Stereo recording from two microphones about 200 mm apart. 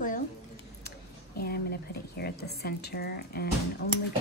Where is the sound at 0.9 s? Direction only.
50° left (ahead or behind).